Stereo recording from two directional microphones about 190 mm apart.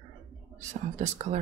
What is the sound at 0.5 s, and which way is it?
Speech, 40° right (ahead or behind).